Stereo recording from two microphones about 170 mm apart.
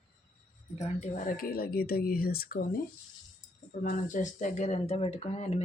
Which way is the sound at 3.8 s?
50° left (ahead or behind).